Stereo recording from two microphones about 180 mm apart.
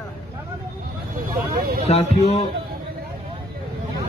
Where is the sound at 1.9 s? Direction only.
35° left (ahead or behind).